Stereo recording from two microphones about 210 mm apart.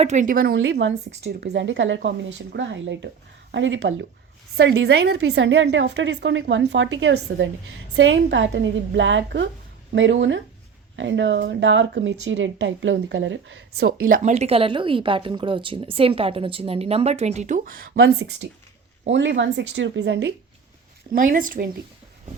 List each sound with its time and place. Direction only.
0.0 s speech: 35° right (ahead or behind)
0.5 s a woman's voice: 65° right (ahead or behind)
21.1 s speech: 40° right (ahead or behind)